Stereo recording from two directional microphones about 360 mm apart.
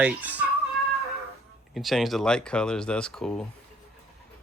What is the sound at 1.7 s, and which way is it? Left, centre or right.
Speech, centre.